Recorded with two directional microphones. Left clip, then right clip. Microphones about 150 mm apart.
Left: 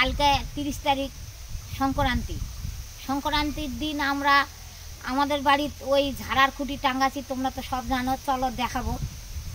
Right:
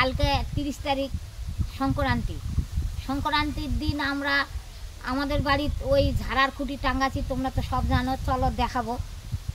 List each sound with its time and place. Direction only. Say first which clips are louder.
0.0 s a woman's voice: left 3 dB; 20° right (ahead or behind)